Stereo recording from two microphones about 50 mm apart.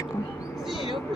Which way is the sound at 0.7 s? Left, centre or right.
Centre.